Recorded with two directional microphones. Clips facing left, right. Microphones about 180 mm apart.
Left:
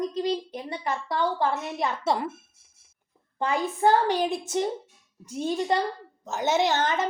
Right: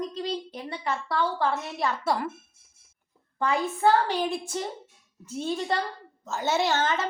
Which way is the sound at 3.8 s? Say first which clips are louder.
Left 2 dB; 15° left (ahead or behind).